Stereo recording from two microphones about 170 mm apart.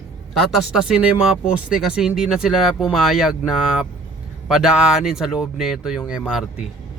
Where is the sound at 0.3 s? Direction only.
Centre (ahead or behind).